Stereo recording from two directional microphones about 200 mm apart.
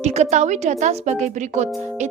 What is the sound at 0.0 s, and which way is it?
Speech, 35° right (ahead or behind).